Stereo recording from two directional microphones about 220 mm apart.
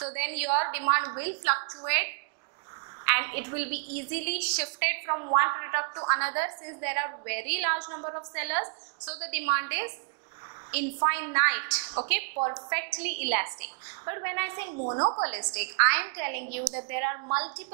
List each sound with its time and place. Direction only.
0.0 s a woman's voice: 10° right (ahead or behind)
1.6 s a woman's voice: 25° right (ahead or behind)
3.1 s a woman's voice: 15° right (ahead or behind)
14.7 s a woman's voice: 25° right (ahead or behind)
15.2 s a woman's voice: 10° right (ahead or behind)